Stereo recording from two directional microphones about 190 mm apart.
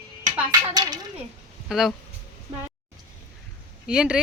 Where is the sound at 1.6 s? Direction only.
Centre (ahead or behind).